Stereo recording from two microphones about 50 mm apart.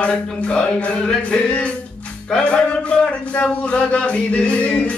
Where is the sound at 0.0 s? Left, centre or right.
Left.